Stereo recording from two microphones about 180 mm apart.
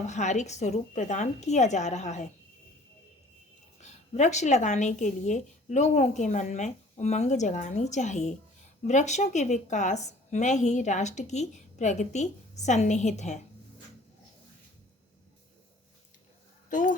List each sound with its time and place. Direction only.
0.1 s a woman's voice: 40° left (ahead or behind)
3.8 s a woman's voice: 40° left (ahead or behind)
16.6 s speech: 45° left (ahead or behind)